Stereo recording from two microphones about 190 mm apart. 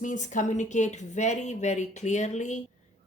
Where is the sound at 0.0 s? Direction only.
40° left (ahead or behind).